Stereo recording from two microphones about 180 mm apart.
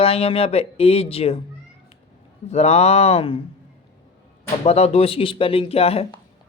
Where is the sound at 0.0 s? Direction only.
35° left (ahead or behind).